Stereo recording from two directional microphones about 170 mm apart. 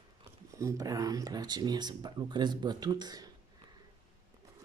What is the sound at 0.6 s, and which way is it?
Speech, 20° right (ahead or behind).